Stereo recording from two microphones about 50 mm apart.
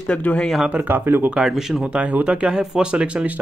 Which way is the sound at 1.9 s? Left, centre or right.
Right.